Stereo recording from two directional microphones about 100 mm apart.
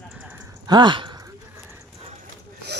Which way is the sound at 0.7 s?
50° right (ahead or behind).